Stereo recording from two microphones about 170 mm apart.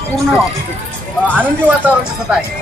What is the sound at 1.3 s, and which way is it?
Speech, 10° right (ahead or behind).